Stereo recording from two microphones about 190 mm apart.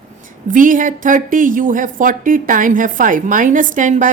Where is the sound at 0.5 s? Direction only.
45° right (ahead or behind).